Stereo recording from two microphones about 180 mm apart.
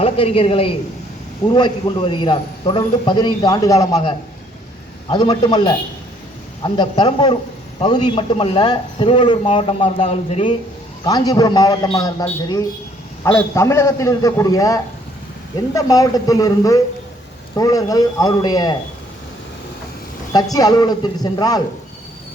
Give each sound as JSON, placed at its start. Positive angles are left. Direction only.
{"t": 0.0, "sound": "a man's voice", "side_deg": 30}
{"t": 11.0, "sound": "a man's voice", "side_deg": 20}
{"t": 13.3, "sound": "a man's voice", "side_deg": 15}
{"t": 20.3, "sound": "a man's voice", "side_deg": 20}